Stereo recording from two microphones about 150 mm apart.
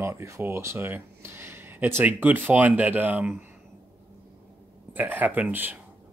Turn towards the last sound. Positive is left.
turn(degrees=-10)  # may be behind; listen again after turning